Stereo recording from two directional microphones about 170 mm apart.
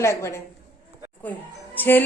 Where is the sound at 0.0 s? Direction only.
15° left (ahead or behind).